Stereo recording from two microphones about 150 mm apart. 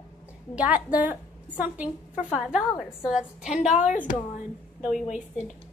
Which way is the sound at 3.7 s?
55° left (ahead or behind).